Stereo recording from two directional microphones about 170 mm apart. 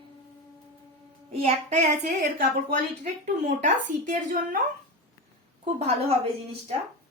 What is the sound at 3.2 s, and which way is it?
A woman's voice, 45° right (ahead or behind).